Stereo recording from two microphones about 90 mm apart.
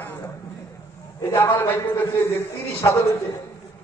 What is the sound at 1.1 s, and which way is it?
A man's voice, 30° left (ahead or behind).